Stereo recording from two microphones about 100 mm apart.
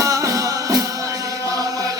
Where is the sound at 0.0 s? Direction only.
35° right (ahead or behind).